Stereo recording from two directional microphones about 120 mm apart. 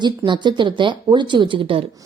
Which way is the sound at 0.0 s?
40° right (ahead or behind).